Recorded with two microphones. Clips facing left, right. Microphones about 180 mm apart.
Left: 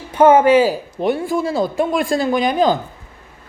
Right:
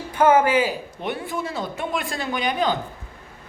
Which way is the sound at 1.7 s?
35° left (ahead or behind).